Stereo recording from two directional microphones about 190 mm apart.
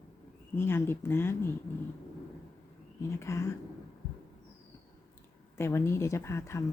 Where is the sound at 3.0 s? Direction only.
15° left (ahead or behind).